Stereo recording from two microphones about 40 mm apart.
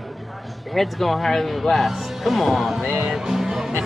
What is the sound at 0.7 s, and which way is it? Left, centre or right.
Speech, centre.